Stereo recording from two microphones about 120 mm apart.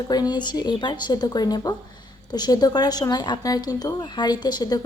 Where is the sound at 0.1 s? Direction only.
35° left (ahead or behind).